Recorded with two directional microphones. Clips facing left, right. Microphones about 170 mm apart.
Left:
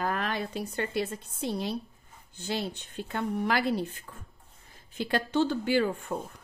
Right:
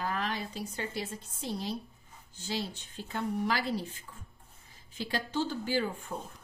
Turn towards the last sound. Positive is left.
turn(degrees=70)  # may be behind; listen again after turning